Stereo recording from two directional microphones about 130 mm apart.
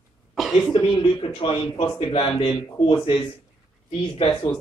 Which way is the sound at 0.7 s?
40° left (ahead or behind).